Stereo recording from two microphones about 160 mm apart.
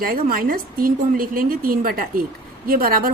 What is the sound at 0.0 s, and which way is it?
A woman's voice, 65° right (ahead or behind).